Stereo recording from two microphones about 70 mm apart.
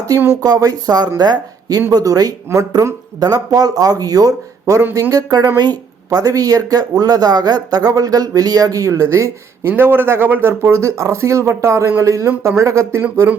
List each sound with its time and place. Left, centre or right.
0.1 s speech: right
2.5 s speech: right
7.9 s speech: right
9.6 s speech: right
10.6 s speech: right